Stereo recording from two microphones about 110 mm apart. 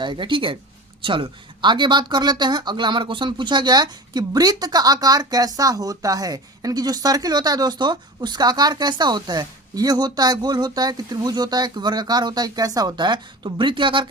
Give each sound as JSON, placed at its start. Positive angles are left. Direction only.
{"t": 0.0, "sound": "speech", "side_deg": -45}